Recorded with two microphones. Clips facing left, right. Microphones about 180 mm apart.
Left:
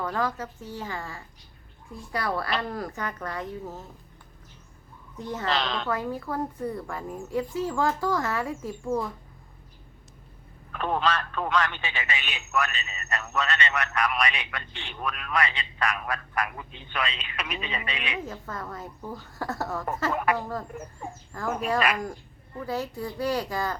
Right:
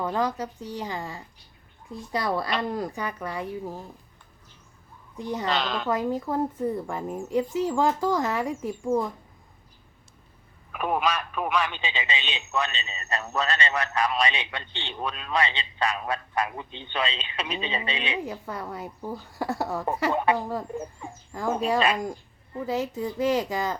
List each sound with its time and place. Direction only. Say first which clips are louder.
0.1 s a woman's voice: right 2 dB; 20° right (ahead or behind)
5.1 s a woman's voice: right 3 dB; 15° right (ahead or behind)
5.5 s a woman's voice: even; centre (ahead or behind)
5.9 s speech: right 4 dB; 20° right (ahead or behind)
10.7 s speech: even; 10° right (ahead or behind); by 18.2 s 25° right (ahead or behind)
18.2 s a woman's voice: right 3 dB; 15° right (ahead or behind)
21.4 s speech: right 2 dB; 25° right (ahead or behind)